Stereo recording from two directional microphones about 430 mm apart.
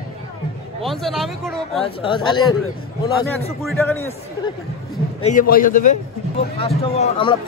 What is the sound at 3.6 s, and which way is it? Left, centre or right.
Speech, centre.